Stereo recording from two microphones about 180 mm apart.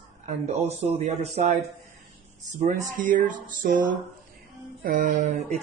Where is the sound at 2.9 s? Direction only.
45° right (ahead or behind).